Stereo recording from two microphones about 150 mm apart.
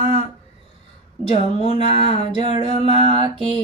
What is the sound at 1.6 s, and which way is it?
Mantra, 50° left (ahead or behind).